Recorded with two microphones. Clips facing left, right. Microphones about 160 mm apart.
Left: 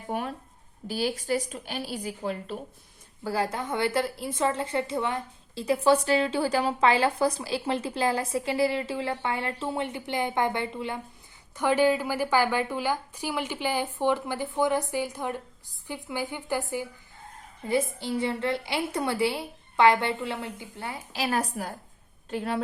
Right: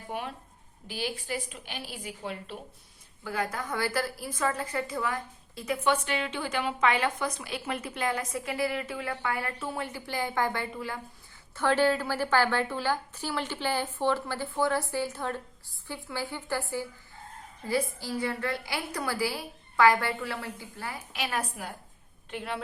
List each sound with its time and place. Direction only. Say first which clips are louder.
0.1 s a woman's voice: left 5 dB; 45° left (ahead or behind)